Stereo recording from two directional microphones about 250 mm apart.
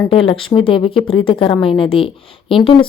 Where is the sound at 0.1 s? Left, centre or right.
Left.